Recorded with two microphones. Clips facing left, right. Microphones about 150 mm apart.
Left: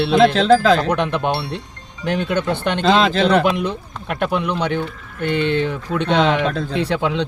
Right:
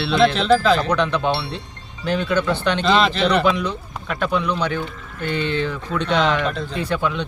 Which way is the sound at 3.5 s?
50° left (ahead or behind).